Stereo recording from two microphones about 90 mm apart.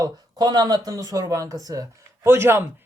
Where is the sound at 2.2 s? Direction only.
25° right (ahead or behind).